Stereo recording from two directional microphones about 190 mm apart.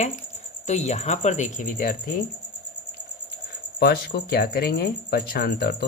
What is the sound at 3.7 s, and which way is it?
Speech, 55° left (ahead or behind).